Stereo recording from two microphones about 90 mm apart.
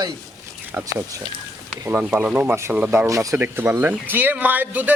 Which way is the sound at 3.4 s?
25° right (ahead or behind).